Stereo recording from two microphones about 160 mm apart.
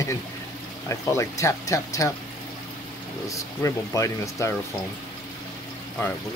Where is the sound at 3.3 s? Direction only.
20° left (ahead or behind).